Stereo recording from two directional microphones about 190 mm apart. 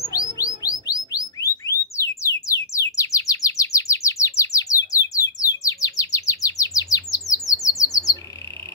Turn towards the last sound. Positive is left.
turn(degrees=15)  # may be behind; listen again after turning